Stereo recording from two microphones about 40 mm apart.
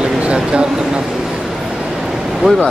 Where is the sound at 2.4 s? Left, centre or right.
Centre.